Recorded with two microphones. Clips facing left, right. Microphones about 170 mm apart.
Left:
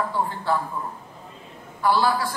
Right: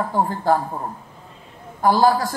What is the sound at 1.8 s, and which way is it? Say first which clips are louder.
Speech: right 5 dB; 45° right (ahead or behind).